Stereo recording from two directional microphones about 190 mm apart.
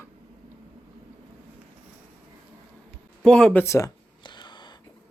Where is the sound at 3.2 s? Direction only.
5° left (ahead or behind); by 4.7 s 25° left (ahead or behind).